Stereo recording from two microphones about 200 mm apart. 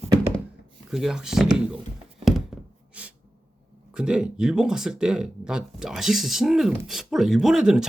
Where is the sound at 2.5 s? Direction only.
Centre (ahead or behind).